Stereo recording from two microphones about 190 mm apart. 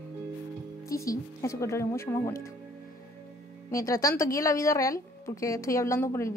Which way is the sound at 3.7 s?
15° left (ahead or behind).